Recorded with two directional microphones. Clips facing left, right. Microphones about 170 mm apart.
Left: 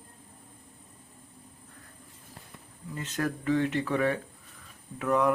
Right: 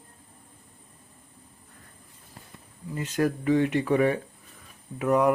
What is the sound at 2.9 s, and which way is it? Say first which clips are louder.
Speech: right 6 dB; 10° right (ahead or behind).